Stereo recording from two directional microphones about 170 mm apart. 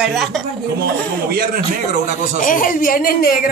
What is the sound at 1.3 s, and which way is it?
Speech, 60° right (ahead or behind).